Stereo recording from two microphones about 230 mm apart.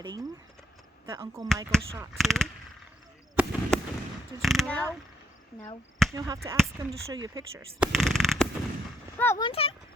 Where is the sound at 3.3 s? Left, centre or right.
Centre.